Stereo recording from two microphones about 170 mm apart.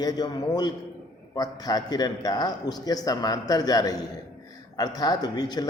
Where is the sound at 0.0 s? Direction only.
25° left (ahead or behind).